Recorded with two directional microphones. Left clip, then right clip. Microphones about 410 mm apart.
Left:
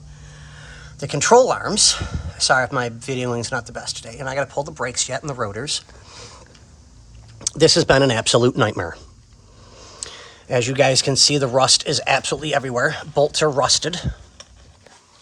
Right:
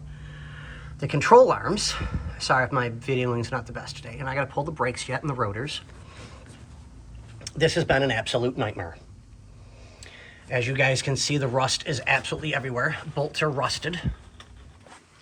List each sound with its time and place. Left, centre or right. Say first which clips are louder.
0.3 s speech: left 2 dB; centre
7.4 s speech: left 8 dB; centre
9.8 s a sound: left 12 dB; left
10.5 s speech: left 7 dB; centre